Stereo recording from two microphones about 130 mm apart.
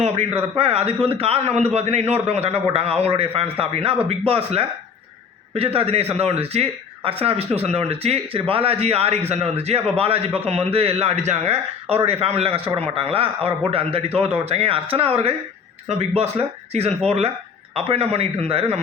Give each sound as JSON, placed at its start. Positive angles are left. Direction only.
{"t": 0.3, "sound": "speech", "side_deg": -50}